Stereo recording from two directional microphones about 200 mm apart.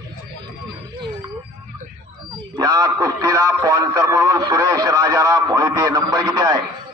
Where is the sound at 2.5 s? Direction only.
20° right (ahead or behind).